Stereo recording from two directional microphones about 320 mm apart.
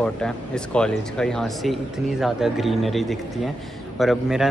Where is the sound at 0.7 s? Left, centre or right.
Centre.